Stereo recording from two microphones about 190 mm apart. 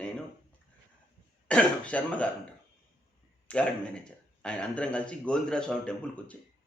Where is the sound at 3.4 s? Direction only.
5° left (ahead or behind).